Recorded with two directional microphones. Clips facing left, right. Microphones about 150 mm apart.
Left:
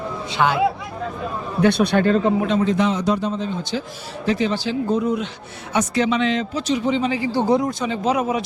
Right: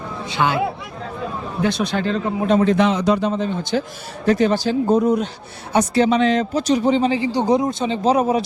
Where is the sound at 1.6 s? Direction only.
60° left (ahead or behind).